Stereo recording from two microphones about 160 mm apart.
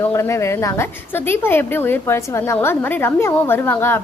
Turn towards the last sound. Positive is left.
turn(degrees=15)  # may be behind; listen again after turning